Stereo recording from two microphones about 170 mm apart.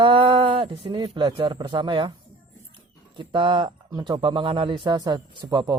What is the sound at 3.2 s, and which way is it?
Speech, 30° right (ahead or behind).